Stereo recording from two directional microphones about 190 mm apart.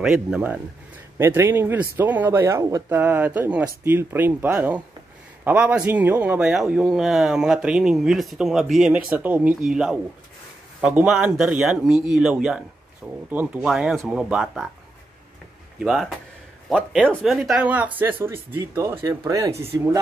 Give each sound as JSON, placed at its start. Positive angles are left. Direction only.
{"t": 0.0, "sound": "a man's voice", "side_deg": -5}
{"t": 15.8, "sound": "a man's voice", "side_deg": 0}